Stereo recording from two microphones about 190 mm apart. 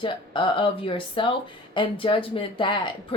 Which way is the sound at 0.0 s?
25° left (ahead or behind).